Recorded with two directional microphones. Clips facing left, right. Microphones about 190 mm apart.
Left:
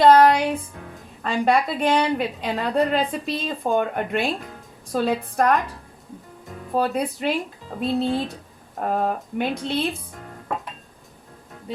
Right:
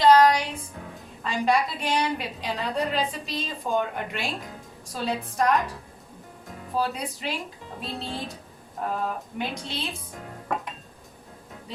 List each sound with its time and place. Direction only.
0.0 s music: 55° left (ahead or behind)
1.2 s a woman's voice: 55° left (ahead or behind)
6.7 s a woman's voice: 55° left (ahead or behind)